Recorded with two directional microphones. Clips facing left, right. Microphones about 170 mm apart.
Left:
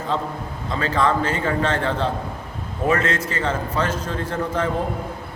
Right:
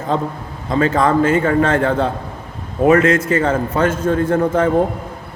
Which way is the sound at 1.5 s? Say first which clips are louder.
Right 7 dB; 50° right (ahead or behind).